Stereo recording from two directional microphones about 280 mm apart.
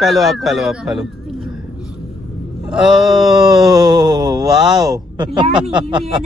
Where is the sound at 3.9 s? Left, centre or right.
Centre.